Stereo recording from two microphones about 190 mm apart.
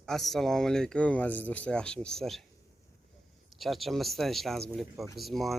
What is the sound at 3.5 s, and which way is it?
Speech, centre (ahead or behind).